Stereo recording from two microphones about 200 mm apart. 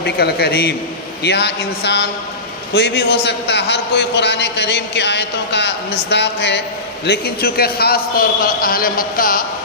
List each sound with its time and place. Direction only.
0.0 s a man's voice: 50° left (ahead or behind)